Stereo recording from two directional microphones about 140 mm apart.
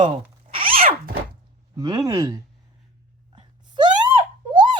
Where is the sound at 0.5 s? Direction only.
40° right (ahead or behind).